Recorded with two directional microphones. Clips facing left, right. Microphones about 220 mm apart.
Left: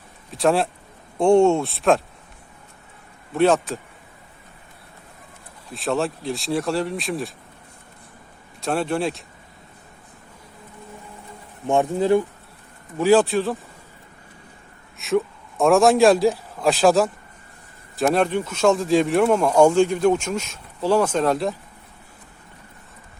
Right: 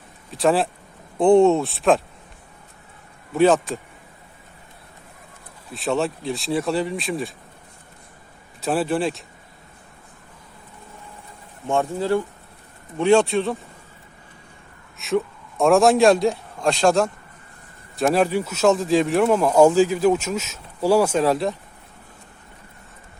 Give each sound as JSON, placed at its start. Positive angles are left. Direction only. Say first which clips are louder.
{"t": 0.3, "sound": "speech", "louder": "even", "side_deg": 0}
{"t": 3.3, "sound": "speech", "louder": "right 1 dB", "side_deg": 0}
{"t": 5.7, "sound": "speech", "louder": "right 1 dB", "side_deg": 0}
{"t": 8.6, "sound": "speech", "louder": "right 1 dB", "side_deg": -5}
{"t": 11.7, "sound": "speech", "louder": "left 3 dB", "side_deg": 15}
{"t": 13.0, "sound": "speech", "louder": "even", "side_deg": 5}
{"t": 14.9, "sound": "a man's voice", "louder": "left 1 dB", "side_deg": 0}